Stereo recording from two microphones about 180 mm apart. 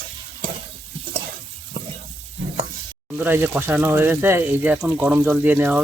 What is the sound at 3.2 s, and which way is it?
Speech, 10° right (ahead or behind).